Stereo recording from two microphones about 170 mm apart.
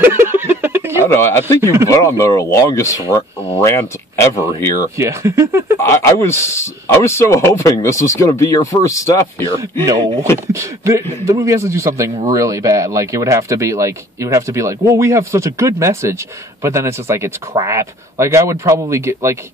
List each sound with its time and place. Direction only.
0.0 s a sound: 15° right (ahead or behind)
1.0 s speech: 15° left (ahead or behind)
1.6 s speech: 15° right (ahead or behind)
1.9 s speech: 15° left (ahead or behind)
4.9 s speech: 15° right (ahead or behind)
5.8 s speech: 15° left (ahead or behind)
10.5 s speech: 15° right (ahead or behind)